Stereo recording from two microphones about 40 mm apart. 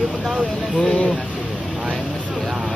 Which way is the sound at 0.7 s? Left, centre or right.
Centre.